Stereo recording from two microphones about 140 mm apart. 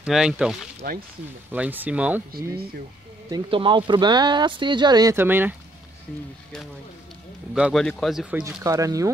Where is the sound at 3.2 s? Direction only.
35° right (ahead or behind).